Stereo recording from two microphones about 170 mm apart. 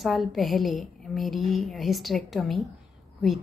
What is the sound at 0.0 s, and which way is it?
A woman's voice, centre (ahead or behind).